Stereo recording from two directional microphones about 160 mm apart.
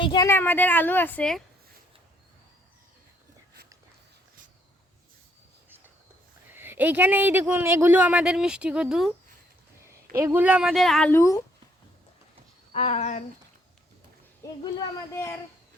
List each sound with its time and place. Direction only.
0.0 s speech: 25° left (ahead or behind)
0.3 s a woman's voice: 15° left (ahead or behind)
6.5 s speech: 15° right (ahead or behind)
10.2 s speech: 15° right (ahead or behind); by 11.1 s centre (ahead or behind)
11.1 s speech: 20° left (ahead or behind)
12.7 s speech: 40° left (ahead or behind)
14.4 s speech: 20° left (ahead or behind)